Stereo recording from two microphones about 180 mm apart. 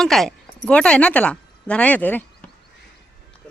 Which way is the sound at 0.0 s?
Centre (ahead or behind).